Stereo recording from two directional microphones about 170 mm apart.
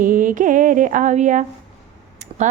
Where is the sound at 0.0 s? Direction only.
50° right (ahead or behind).